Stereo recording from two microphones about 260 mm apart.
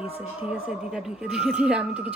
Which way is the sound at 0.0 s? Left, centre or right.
Centre.